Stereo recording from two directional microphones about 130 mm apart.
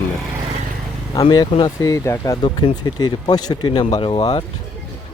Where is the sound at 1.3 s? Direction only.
35° left (ahead or behind).